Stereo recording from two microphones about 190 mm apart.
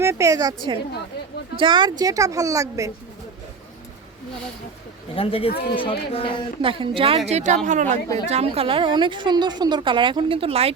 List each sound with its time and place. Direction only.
0.0 s a woman's voice: 15° right (ahead or behind)
5.1 s speech: 30° left (ahead or behind)
6.6 s a woman's voice: 25° right (ahead or behind)